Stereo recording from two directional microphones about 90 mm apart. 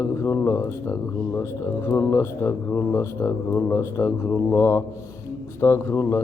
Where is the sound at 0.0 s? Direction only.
30° left (ahead or behind).